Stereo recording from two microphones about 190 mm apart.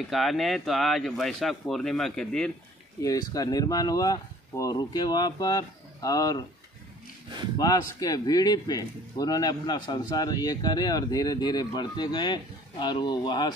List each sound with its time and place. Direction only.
0.1 s speech: centre (ahead or behind)
3.0 s speech: 20° left (ahead or behind)
7.5 s speech: 20° left (ahead or behind)